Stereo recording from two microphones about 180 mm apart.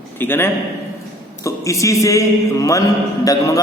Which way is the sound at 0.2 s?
10° left (ahead or behind).